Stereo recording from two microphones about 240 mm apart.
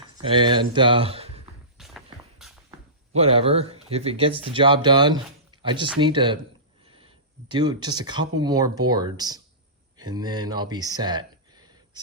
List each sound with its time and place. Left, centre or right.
0.3 s speech: centre
1.8 s a sound: centre
3.2 s speech: right